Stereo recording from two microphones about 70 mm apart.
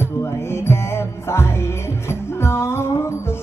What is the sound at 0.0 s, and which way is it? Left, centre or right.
Music, left.